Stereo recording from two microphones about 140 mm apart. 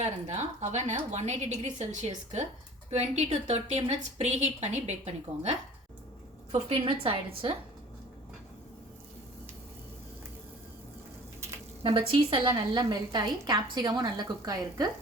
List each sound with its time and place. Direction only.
0.0 s a woman's voice: 55° right (ahead or behind)
11.8 s a woman's voice: 45° right (ahead or behind)